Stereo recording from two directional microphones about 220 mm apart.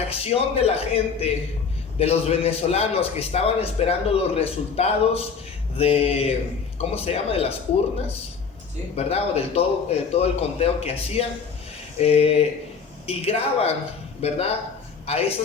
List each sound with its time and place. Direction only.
0.1 s a man's voice: 25° left (ahead or behind)
9.0 s a man's voice: 30° left (ahead or behind)